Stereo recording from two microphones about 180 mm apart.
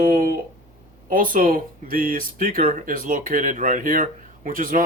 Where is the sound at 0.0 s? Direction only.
50° right (ahead or behind).